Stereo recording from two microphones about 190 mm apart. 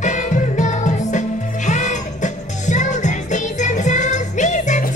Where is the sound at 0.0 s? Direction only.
40° left (ahead or behind).